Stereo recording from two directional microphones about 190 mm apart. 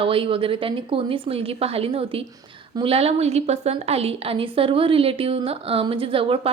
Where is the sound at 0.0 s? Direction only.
30° right (ahead or behind).